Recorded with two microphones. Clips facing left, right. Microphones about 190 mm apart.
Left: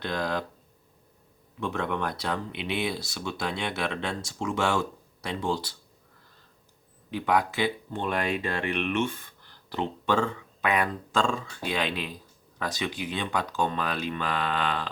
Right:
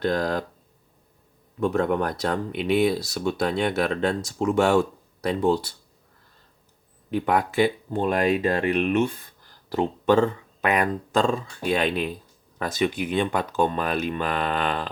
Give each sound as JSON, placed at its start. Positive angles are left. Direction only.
{"t": 0.0, "sound": "speech", "side_deg": -45}
{"t": 1.5, "sound": "speech", "side_deg": -40}
{"t": 5.3, "sound": "speech", "side_deg": -55}
{"t": 7.1, "sound": "speech", "side_deg": -50}